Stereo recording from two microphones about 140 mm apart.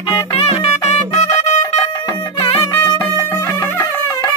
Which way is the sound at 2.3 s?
40° left (ahead or behind).